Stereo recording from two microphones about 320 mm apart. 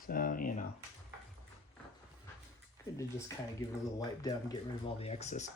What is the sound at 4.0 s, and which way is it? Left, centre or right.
Speech, centre.